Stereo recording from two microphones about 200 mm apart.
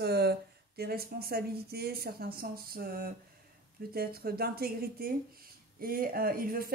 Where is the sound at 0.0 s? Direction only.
55° right (ahead or behind).